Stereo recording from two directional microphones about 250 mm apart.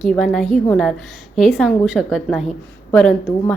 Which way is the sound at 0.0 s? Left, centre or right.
Centre.